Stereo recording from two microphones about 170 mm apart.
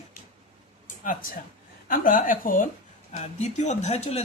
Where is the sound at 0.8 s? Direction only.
50° left (ahead or behind).